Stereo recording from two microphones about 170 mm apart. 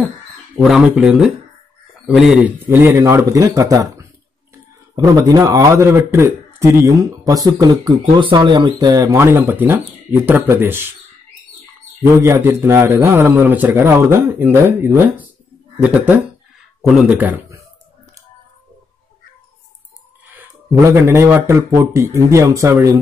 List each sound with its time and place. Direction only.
0.6 s a man's voice: 5° right (ahead or behind)
12.2 s a man's voice: 15° right (ahead or behind)
20.3 s a man's voice: 15° right (ahead or behind)